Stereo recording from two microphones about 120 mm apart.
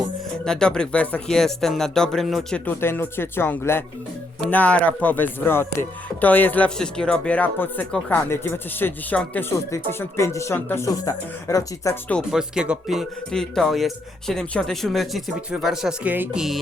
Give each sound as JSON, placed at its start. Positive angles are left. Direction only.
{"t": 0.4, "sound": "a man's voice", "side_deg": 5}
{"t": 2.6, "sound": "speech", "side_deg": 20}
{"t": 12.3, "sound": "a man's voice", "side_deg": -5}